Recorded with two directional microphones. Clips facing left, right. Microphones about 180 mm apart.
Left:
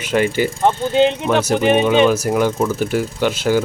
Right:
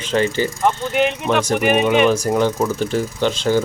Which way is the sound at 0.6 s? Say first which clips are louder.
Left 4 dB; 30° left (ahead or behind).